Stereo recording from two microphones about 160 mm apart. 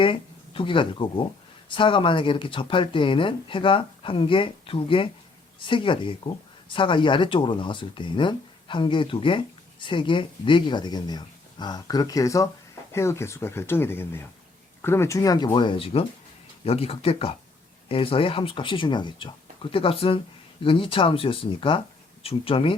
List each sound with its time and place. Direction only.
0.0 s speech: 30° left (ahead or behind)